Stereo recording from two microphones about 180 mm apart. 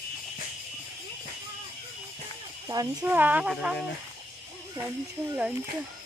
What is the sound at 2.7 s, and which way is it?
Speech, 15° right (ahead or behind).